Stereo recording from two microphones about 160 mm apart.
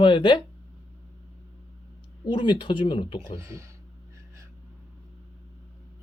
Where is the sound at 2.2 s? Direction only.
30° left (ahead or behind).